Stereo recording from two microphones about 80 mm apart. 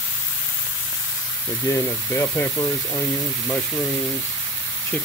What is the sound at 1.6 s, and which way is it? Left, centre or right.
Speech, left.